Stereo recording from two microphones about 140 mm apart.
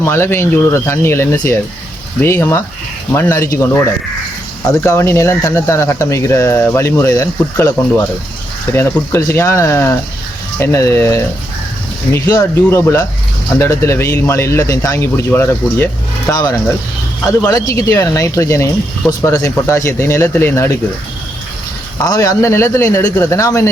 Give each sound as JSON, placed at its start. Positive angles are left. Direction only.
{"t": 0.0, "sound": "speech", "side_deg": 15}
{"t": 8.7, "sound": "speech", "side_deg": 20}
{"t": 22.0, "sound": "speech", "side_deg": 25}